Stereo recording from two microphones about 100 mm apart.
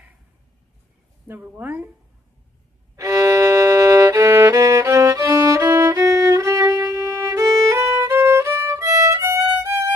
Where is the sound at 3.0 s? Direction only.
30° right (ahead or behind).